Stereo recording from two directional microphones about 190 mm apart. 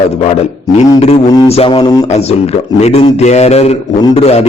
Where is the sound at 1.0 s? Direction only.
35° left (ahead or behind).